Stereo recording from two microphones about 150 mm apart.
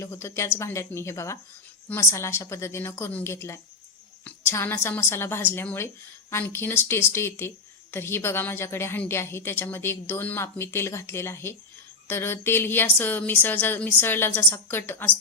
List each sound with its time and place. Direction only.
0.0 s speech: 20° left (ahead or behind)